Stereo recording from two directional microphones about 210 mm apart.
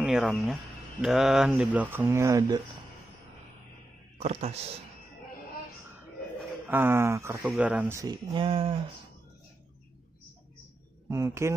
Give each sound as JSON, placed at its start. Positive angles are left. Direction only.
{"t": 0.0, "sound": "speech", "side_deg": 0}
{"t": 4.2, "sound": "speech", "side_deg": -30}
{"t": 6.7, "sound": "speech", "side_deg": -10}
{"t": 11.1, "sound": "speech", "side_deg": -15}